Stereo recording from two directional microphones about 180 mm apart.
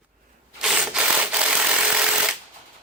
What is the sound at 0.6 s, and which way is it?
Sanding, 5° right (ahead or behind).